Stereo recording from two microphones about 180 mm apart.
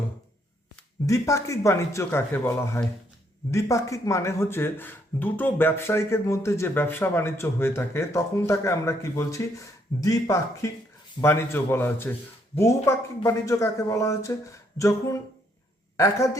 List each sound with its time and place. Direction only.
1.0 s speech: 20° left (ahead or behind)